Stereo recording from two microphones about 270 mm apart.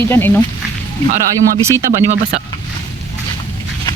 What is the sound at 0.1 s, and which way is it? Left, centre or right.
Speech, centre.